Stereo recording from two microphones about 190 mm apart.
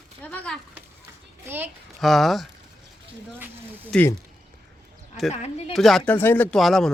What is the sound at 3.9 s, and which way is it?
Speech, 10° left (ahead or behind).